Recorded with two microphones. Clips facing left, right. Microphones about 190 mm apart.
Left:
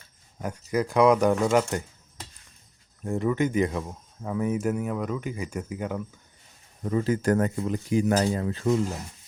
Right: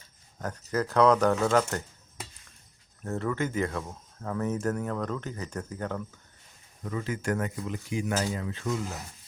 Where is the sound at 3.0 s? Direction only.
15° left (ahead or behind).